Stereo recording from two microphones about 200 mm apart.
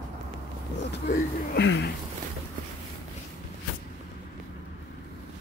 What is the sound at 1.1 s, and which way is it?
Speech, 60° left (ahead or behind).